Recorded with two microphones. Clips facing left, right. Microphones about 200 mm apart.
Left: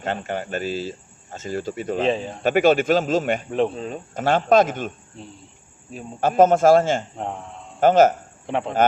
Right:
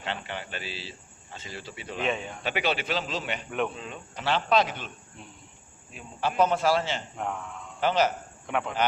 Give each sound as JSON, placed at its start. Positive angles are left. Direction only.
{"t": 0.0, "sound": "speech", "side_deg": 45}
{"t": 2.0, "sound": "a man's voice", "side_deg": 30}
{"t": 2.4, "sound": "speech", "side_deg": 45}
{"t": 3.5, "sound": "speech", "side_deg": 35}
{"t": 5.2, "sound": "a man's voice", "side_deg": 30}
{"t": 5.9, "sound": "speech", "side_deg": 45}
{"t": 7.2, "sound": "speech", "side_deg": 30}
{"t": 7.8, "sound": "speech", "side_deg": 50}
{"t": 8.4, "sound": "a man's voice", "side_deg": 30}